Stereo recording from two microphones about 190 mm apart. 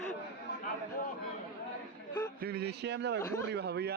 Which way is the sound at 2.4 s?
55° right (ahead or behind).